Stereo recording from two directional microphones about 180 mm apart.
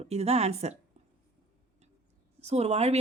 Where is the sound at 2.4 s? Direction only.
35° right (ahead or behind).